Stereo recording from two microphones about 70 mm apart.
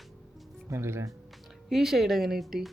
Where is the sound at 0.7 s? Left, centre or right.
Right.